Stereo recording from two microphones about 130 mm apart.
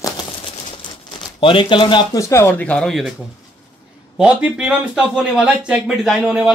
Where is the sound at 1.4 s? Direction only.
40° left (ahead or behind).